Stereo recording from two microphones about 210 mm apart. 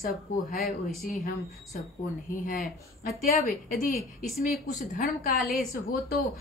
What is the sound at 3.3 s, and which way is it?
A woman's voice, 40° left (ahead or behind).